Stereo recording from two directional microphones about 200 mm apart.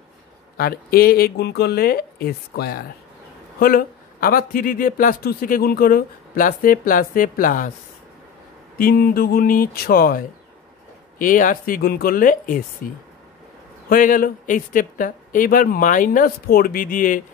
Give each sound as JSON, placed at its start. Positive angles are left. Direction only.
{"t": 0.6, "sound": "speech", "side_deg": 50}
{"t": 8.7, "sound": "speech", "side_deg": 45}
{"t": 13.8, "sound": "speech", "side_deg": 45}